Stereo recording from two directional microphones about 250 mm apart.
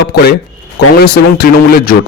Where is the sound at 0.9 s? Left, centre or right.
Left.